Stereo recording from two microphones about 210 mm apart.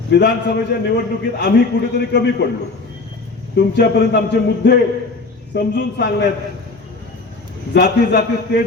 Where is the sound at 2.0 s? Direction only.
50° left (ahead or behind).